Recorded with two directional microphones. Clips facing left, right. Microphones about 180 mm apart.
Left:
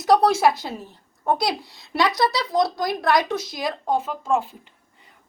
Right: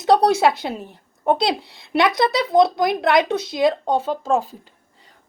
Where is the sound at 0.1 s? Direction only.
25° right (ahead or behind).